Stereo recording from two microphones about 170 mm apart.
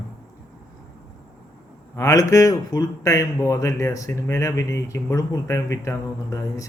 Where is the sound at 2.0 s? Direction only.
20° left (ahead or behind).